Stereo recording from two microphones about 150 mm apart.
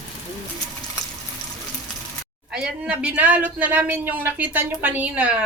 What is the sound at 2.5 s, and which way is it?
Speech, 5° right (ahead or behind).